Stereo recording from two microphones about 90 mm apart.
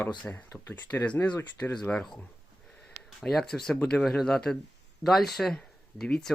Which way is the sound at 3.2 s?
5° left (ahead or behind).